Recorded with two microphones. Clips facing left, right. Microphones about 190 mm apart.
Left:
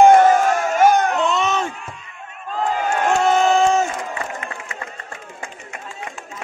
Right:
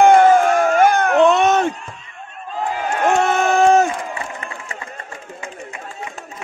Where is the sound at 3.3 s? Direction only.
60° right (ahead or behind).